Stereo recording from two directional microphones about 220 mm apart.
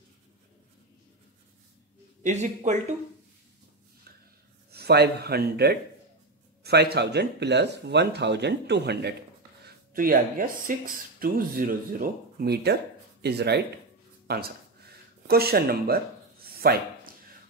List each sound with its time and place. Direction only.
2.2 s speech: 35° right (ahead or behind)
4.6 s speech: 45° right (ahead or behind)
14.2 s a sound: 45° right (ahead or behind)